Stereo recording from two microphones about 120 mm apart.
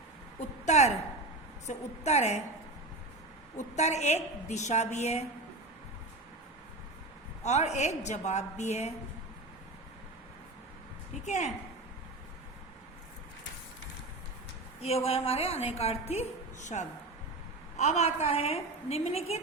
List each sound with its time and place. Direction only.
0.3 s a sound: 70° left (ahead or behind)
1.6 s a woman's voice: 65° left (ahead or behind)
3.6 s a woman's voice: 70° left (ahead or behind)
7.4 s a woman's voice: 70° left (ahead or behind)
11.1 s a woman's voice: 75° left (ahead or behind)
14.8 s a woman's voice: 60° left (ahead or behind); by 16.8 s 80° left
17.7 s a woman's voice: 65° left (ahead or behind)